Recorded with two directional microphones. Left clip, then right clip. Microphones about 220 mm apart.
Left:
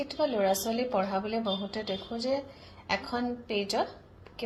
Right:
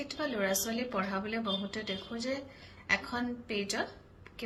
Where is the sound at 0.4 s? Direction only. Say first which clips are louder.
Left 5 dB; 30° right (ahead or behind).